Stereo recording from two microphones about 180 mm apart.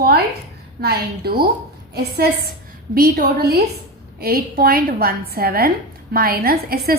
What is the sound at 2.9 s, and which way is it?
A woman's voice, 55° right (ahead or behind).